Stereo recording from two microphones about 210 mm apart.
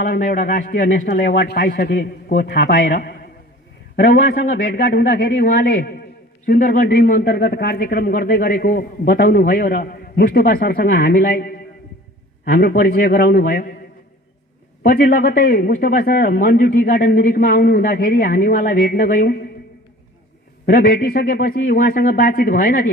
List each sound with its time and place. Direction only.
0.0 s a man's voice: 40° left (ahead or behind)
4.6 s a man's voice: 45° left (ahead or behind)
14.8 s a man's voice: 40° left (ahead or behind)
20.7 s a man's voice: 40° left (ahead or behind)